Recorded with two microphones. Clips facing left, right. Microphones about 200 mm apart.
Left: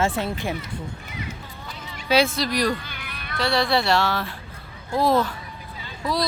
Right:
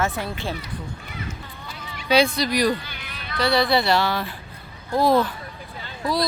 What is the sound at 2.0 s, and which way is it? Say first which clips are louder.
Speech: right 1 dB; 5° left (ahead or behind).